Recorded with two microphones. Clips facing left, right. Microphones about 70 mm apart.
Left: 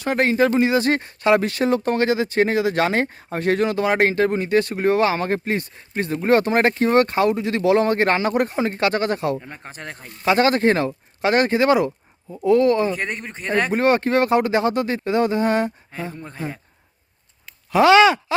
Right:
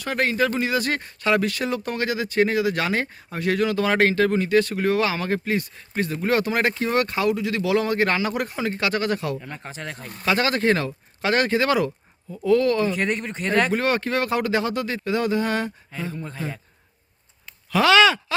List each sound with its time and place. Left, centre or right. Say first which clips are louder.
0.0 s speech: left 4 dB; left
17.7 s speech: left 4 dB; left